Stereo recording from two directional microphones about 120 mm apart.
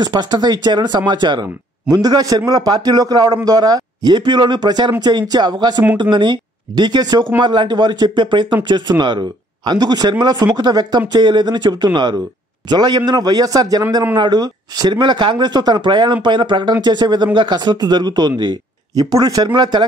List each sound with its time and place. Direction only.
0.0 s speech: 35° right (ahead or behind)